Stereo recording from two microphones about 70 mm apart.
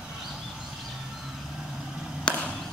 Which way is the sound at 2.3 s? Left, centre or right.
Centre.